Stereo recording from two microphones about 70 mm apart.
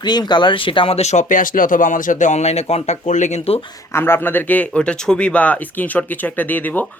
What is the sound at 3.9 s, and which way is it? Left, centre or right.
Speech, left.